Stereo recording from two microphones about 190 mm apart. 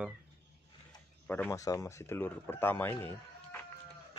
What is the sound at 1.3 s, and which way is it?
Speech, 10° left (ahead or behind).